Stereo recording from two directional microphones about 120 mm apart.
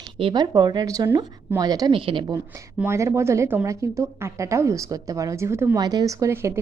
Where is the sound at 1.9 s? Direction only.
45° right (ahead or behind).